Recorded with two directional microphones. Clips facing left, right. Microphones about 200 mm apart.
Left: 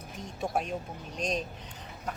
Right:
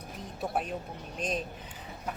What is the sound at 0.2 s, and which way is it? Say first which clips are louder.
Speech: left 1 dB; centre (ahead or behind).